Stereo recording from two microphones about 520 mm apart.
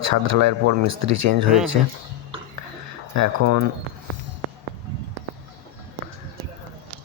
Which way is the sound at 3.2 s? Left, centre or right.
Right.